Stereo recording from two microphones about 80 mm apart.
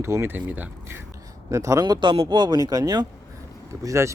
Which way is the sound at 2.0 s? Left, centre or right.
Right.